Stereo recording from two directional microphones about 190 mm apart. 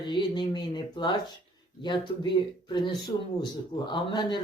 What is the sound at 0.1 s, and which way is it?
Speech, 25° left (ahead or behind).